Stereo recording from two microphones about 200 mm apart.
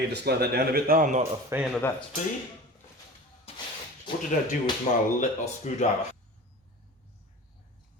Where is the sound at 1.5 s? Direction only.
10° right (ahead or behind).